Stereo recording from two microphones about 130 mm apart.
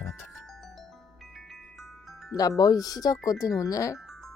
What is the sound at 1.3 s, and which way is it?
Glockenspiel, centre (ahead or behind).